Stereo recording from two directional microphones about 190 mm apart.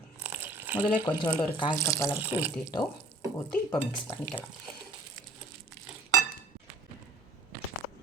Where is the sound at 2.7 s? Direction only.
20° left (ahead or behind).